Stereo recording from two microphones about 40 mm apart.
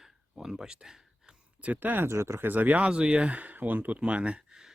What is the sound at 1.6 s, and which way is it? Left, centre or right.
Speech, right.